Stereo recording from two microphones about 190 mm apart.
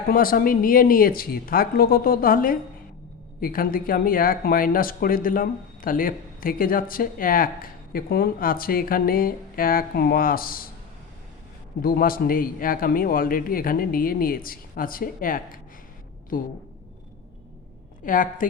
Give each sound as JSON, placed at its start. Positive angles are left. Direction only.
{"t": 0.1, "sound": "speech", "side_deg": 50}
{"t": 11.8, "sound": "speech", "side_deg": 50}
{"t": 18.0, "sound": "speech", "side_deg": 45}